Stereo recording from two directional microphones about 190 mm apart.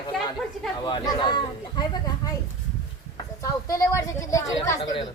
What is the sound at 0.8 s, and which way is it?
A woman's voice, 25° left (ahead or behind).